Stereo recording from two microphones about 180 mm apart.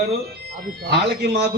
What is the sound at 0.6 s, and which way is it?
Speech, 60° right (ahead or behind).